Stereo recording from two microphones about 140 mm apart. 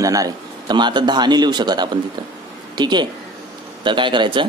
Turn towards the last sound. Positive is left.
turn(degrees=-35)  # may be behind; listen again after turning